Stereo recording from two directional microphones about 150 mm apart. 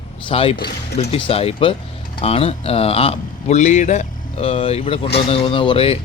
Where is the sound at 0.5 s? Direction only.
90° left.